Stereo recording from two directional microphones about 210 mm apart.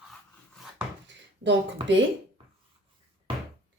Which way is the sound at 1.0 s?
60° right (ahead or behind).